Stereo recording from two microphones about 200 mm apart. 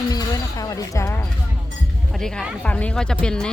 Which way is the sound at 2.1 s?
Centre (ahead or behind).